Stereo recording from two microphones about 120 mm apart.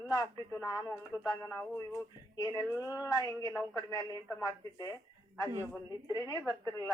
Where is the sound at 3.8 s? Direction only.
30° left (ahead or behind).